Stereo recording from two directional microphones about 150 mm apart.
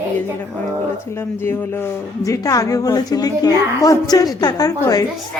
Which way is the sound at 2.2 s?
20° left (ahead or behind).